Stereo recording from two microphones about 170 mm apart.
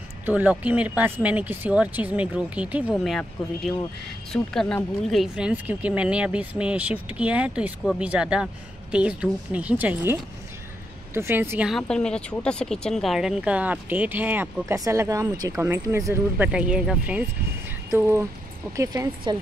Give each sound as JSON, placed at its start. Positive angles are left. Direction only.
{"t": 0.2, "sound": "speech", "side_deg": -10}
{"t": 11.1, "sound": "speech", "side_deg": -15}
{"t": 11.7, "sound": "speech", "side_deg": 5}
{"t": 19.3, "sound": "a woman's voice", "side_deg": -25}